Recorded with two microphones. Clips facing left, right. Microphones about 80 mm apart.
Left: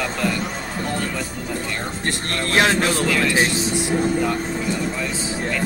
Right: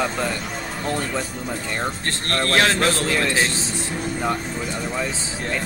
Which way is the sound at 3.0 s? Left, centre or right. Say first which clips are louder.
Left 2 dB; right.